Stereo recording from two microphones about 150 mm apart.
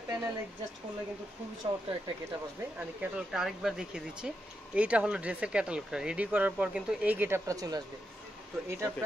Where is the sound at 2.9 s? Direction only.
5° right (ahead or behind).